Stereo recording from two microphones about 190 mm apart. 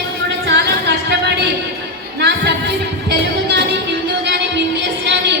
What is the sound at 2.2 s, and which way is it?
Music, 65° right (ahead or behind).